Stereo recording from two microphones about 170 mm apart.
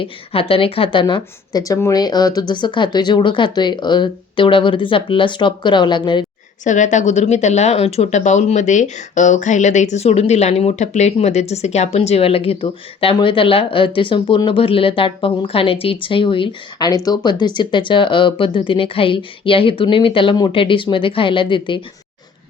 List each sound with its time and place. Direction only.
0.0 s a woman's voice: 35° left (ahead or behind)
6.7 s speech: 45° left (ahead or behind); by 21.8 s 30° left (ahead or behind)